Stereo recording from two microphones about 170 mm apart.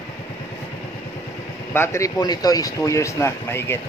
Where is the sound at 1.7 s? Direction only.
15° left (ahead or behind).